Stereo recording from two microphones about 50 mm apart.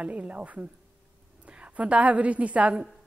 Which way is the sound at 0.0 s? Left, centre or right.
Right.